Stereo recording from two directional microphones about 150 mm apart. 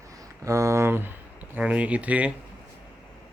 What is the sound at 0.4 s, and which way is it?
Speech, 20° right (ahead or behind).